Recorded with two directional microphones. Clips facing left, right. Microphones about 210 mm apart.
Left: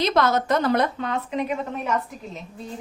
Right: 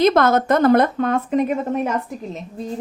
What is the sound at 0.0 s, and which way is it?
A woman's voice, 50° right (ahead or behind).